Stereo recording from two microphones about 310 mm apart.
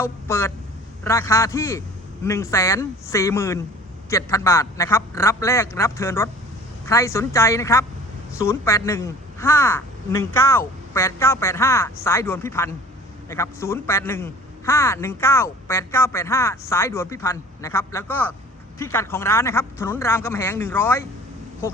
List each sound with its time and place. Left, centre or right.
0.0 s a man's voice: centre